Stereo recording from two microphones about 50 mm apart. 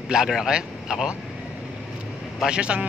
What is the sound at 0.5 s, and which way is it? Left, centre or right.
Speech, centre.